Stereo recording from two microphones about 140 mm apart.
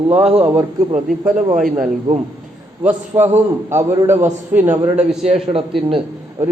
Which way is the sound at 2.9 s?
15° right (ahead or behind).